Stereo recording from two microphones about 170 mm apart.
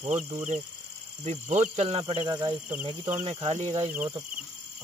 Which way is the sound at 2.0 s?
20° right (ahead or behind).